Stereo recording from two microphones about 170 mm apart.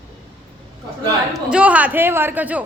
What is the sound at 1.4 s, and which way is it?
A woman's voice, 5° right (ahead or behind).